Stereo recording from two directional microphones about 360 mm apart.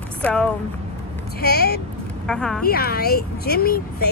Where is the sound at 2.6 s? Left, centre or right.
Left.